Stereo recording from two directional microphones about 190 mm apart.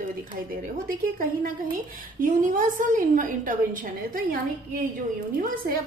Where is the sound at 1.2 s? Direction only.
50° right (ahead or behind).